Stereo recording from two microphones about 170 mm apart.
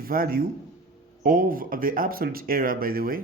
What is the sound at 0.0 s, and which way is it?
A man's voice, 60° right (ahead or behind).